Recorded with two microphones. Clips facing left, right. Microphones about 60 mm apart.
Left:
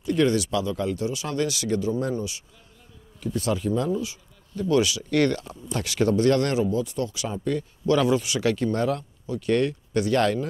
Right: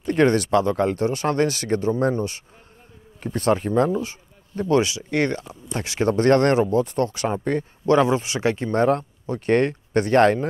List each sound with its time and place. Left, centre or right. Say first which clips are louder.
0.0 s speech: right 3 dB; right